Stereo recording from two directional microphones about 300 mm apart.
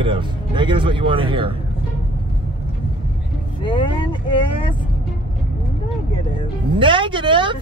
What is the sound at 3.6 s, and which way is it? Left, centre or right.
Speech, centre.